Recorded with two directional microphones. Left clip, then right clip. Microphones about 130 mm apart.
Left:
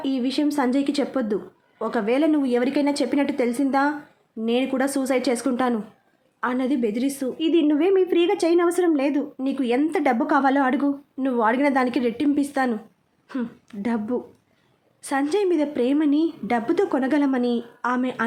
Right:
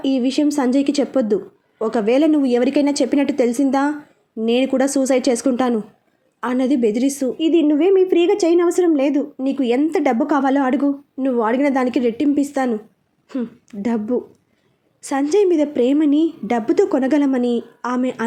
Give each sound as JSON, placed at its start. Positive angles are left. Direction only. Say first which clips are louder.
{"t": 0.0, "sound": "a woman's voice", "louder": "right 5 dB", "side_deg": -25}
{"t": 7.3, "sound": "a woman's voice", "louder": "right 3 dB", "side_deg": -15}
{"t": 13.2, "sound": "a sound", "louder": "right 4 dB", "side_deg": -5}
{"t": 13.8, "sound": "a woman's voice", "louder": "right 5 dB", "side_deg": -20}